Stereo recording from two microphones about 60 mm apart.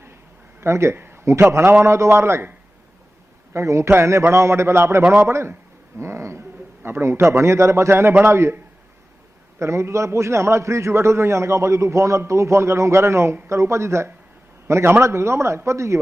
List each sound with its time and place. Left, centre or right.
0.6 s a man's voice: right
0.9 s a man's voice: right
3.5 s a man's voice: right
6.0 s a sound: right
6.8 s a man's voice: right
9.6 s a man's voice: right